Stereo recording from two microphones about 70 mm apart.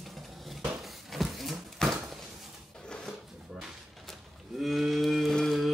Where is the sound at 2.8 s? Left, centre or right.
Centre.